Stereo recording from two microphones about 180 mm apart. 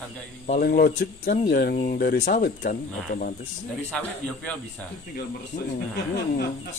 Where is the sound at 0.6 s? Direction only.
60° left (ahead or behind).